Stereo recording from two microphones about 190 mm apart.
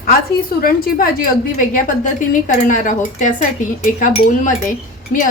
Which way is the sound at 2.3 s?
45° left (ahead or behind).